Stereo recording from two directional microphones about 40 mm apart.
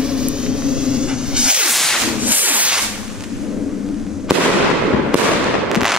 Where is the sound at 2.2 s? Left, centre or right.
Right.